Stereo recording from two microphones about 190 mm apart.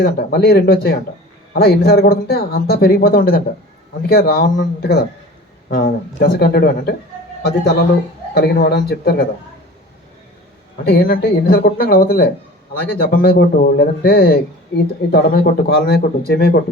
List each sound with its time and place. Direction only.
0.0 s speech: 55° left (ahead or behind)
8.4 s speech: 55° left (ahead or behind)
10.8 s speech: 55° left (ahead or behind)